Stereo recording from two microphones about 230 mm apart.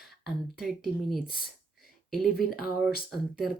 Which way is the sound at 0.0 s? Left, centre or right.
Centre.